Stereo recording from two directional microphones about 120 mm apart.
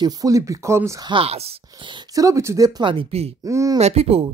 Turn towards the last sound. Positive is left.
turn(degrees=-55)  # may be behind; listen again after turning